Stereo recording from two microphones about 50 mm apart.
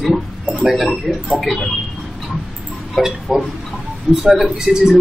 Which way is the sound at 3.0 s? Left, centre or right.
Centre.